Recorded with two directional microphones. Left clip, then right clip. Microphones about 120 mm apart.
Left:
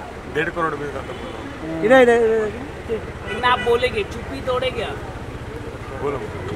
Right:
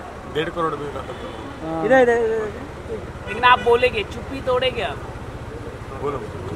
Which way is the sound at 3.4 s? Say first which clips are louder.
Right 3 dB; 30° right (ahead or behind).